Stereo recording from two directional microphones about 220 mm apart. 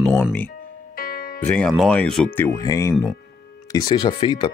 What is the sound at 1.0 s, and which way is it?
Music, 40° left (ahead or behind).